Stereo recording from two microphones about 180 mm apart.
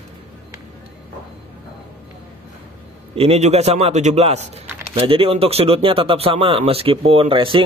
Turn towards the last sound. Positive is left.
turn(degrees=-30)  # may be behind; listen again after turning